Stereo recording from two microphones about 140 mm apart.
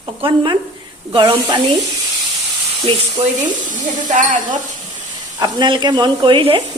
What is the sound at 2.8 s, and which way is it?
Speech, 40° right (ahead or behind).